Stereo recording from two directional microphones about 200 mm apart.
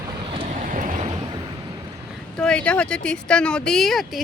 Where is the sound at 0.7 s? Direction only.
40° right (ahead or behind).